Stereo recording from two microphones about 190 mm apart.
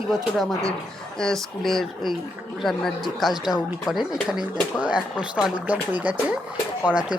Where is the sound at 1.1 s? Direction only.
Centre (ahead or behind).